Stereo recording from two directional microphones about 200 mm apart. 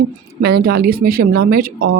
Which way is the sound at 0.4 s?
50° right (ahead or behind).